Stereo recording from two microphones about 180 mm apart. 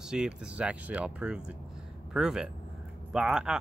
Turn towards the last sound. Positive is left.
turn(degrees=-5)  # may be behind; listen again after turning